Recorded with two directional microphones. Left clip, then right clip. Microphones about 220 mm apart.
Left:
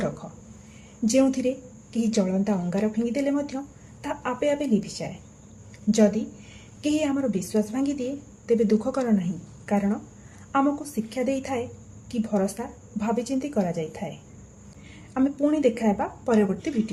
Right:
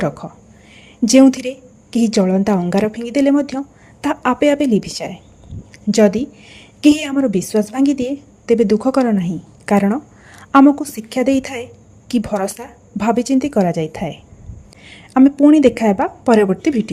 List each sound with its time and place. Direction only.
0.0 s a woman's voice: 40° right (ahead or behind)